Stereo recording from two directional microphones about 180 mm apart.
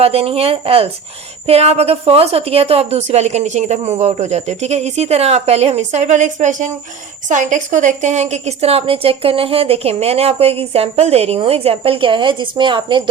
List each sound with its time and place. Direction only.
0.0 s a woman's voice: 35° right (ahead or behind)